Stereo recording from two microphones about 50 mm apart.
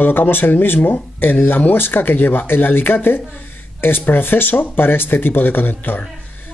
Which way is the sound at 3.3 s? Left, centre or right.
Left.